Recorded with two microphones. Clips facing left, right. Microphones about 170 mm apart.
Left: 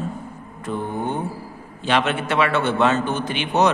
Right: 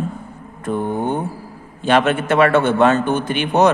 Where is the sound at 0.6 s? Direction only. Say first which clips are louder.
Right 5 dB; 50° right (ahead or behind).